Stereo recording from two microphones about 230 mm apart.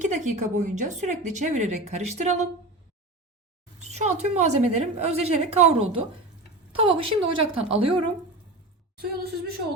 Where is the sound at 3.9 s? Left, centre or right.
Right.